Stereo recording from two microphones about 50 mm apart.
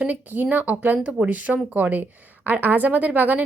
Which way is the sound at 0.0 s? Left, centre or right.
Right.